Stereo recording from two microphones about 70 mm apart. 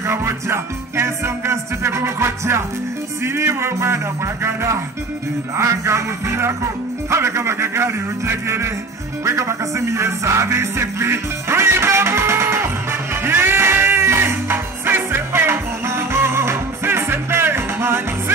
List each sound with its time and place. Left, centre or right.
0.0 s music: right
3.3 s speech: right
9.2 s music: right